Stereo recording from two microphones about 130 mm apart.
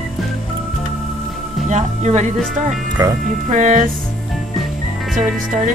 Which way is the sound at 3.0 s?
25° right (ahead or behind).